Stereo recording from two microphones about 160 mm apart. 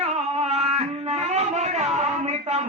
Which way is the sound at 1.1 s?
45° right (ahead or behind).